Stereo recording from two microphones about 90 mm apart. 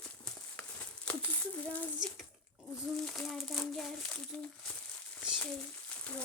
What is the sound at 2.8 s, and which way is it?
Speech, centre (ahead or behind).